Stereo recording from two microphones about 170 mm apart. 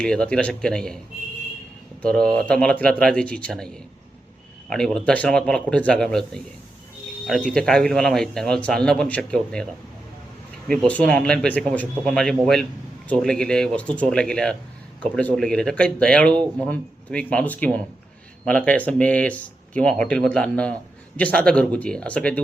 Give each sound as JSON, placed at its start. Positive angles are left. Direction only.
{"t": 0.0, "sound": "speech", "side_deg": 5}
{"t": 2.0, "sound": "speech", "side_deg": 5}
{"t": 4.7, "sound": "speech", "side_deg": 5}
{"t": 10.7, "sound": "speech", "side_deg": 5}